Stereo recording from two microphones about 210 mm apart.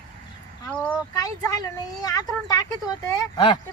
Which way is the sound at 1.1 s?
15° left (ahead or behind).